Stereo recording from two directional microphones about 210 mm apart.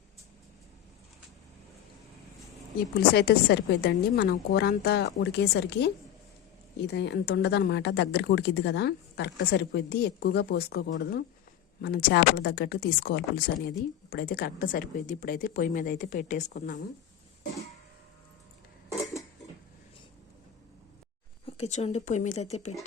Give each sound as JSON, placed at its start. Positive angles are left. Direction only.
{"t": 3.1, "sound": "speech", "side_deg": 50}
{"t": 21.4, "sound": "speech", "side_deg": 30}